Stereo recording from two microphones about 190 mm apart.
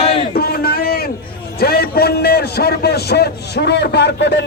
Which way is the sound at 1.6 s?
55° left (ahead or behind).